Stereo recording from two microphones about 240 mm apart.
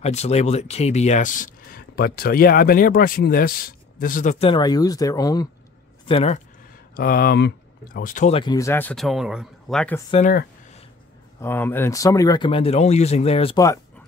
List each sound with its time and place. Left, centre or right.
0.0 s speech: left
7.0 s speech: left; by 10.0 s centre
10.1 s speech: left
11.4 s speech: centre